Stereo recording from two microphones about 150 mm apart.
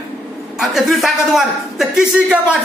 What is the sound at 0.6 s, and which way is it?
A man's voice, centre (ahead or behind).